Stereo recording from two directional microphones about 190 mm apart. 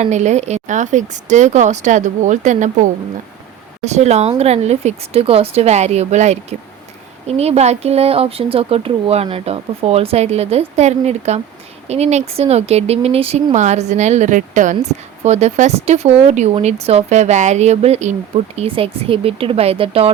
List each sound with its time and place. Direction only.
0.0 s speech: 40° right (ahead or behind)